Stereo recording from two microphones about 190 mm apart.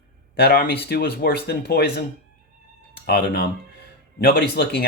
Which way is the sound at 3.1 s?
55° left (ahead or behind).